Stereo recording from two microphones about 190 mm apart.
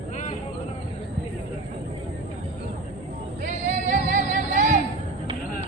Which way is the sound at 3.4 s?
40° right (ahead or behind).